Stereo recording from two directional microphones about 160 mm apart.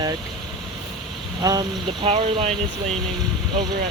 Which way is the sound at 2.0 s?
35° right (ahead or behind).